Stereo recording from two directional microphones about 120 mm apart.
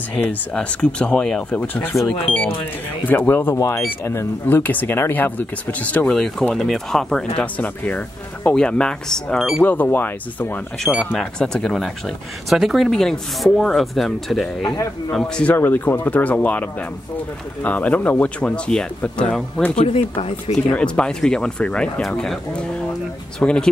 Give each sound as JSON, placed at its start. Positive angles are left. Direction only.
{"t": 0.2, "sound": "speech", "side_deg": 10}
{"t": 3.1, "sound": "speech", "side_deg": 15}
{"t": 9.6, "sound": "speech", "side_deg": 15}
{"t": 15.5, "sound": "speech", "side_deg": 15}
{"t": 17.6, "sound": "speech", "side_deg": 10}
{"t": 19.7, "sound": "speech", "side_deg": 55}
{"t": 20.5, "sound": "speech", "side_deg": 10}